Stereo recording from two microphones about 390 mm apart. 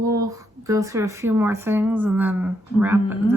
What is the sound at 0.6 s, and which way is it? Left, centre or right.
Speech, centre.